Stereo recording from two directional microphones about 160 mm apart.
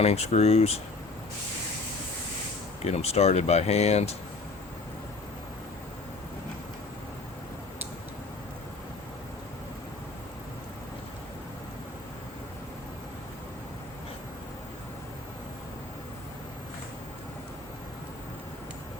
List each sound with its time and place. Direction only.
0.0 s speech: 40° left (ahead or behind)
2.8 s speech: 40° left (ahead or behind)